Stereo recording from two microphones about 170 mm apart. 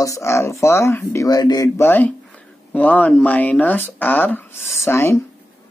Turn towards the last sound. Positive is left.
turn(degrees=15)  # may be behind; listen again after turning